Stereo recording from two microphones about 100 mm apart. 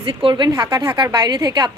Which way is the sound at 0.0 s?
60° right (ahead or behind).